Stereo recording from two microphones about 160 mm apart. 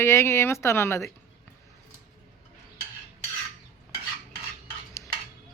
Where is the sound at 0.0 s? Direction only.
15° left (ahead or behind).